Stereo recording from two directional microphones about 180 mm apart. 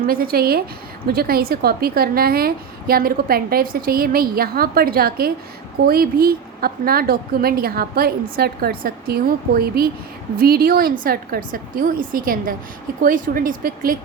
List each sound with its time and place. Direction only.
0.1 s a woman's voice: 55° right (ahead or behind)